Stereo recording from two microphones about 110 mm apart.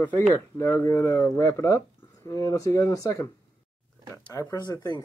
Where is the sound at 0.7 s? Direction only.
25° left (ahead or behind).